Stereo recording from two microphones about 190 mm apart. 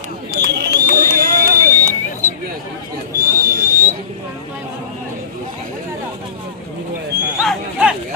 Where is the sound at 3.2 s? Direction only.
15° right (ahead or behind).